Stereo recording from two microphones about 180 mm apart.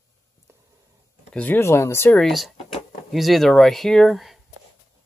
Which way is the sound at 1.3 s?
10° left (ahead or behind).